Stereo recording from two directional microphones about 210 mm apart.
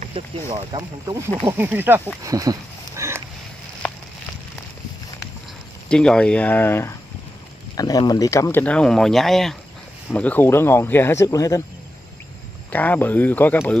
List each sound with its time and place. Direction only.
0.0 s speech: 25° right (ahead or behind)
1.5 s speech: 10° right (ahead or behind)
2.2 s a sound: 15° right (ahead or behind)
5.9 s speech: 5° left (ahead or behind)
12.7 s speech: 10° left (ahead or behind)